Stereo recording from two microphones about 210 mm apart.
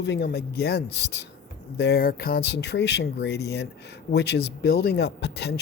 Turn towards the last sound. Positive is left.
turn(degrees=50)  # may be behind; listen again after turning